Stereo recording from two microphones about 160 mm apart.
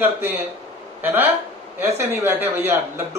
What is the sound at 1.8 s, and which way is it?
A man's voice, 15° right (ahead or behind).